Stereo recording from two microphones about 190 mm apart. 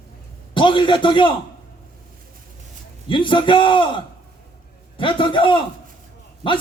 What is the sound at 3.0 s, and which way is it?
A man's voice, 25° left (ahead or behind).